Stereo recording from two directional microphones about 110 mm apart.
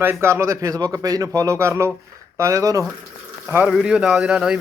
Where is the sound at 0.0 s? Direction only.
20° right (ahead or behind).